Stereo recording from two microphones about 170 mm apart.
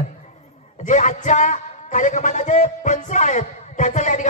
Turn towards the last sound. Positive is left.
turn(degrees=45)  # may be behind; listen again after turning